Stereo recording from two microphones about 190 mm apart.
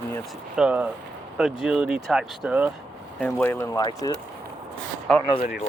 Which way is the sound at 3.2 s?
10° left (ahead or behind).